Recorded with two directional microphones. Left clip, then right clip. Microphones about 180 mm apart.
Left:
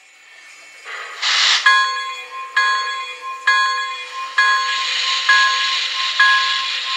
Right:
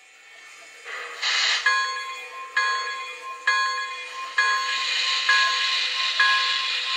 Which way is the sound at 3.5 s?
40° left (ahead or behind).